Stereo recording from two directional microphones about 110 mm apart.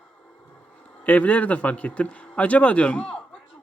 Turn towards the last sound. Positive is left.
turn(degrees=10)  # may be behind; listen again after turning